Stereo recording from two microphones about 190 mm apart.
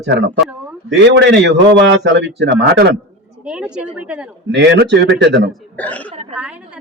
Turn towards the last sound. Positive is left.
turn(degrees=-5)  # may be behind; listen again after turning